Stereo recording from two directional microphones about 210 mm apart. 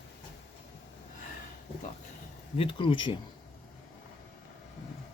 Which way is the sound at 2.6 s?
25° left (ahead or behind).